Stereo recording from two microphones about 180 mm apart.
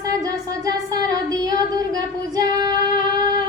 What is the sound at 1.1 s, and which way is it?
Female singing, 20° right (ahead or behind).